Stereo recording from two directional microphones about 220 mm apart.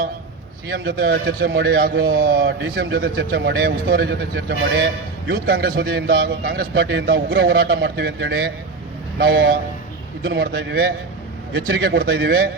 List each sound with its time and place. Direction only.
0.7 s a man's voice: 45° right (ahead or behind)